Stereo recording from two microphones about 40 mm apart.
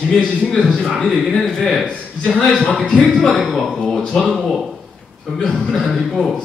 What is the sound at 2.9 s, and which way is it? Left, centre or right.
Speech, centre.